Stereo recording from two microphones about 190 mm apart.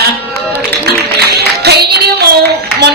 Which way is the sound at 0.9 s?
55° right (ahead or behind).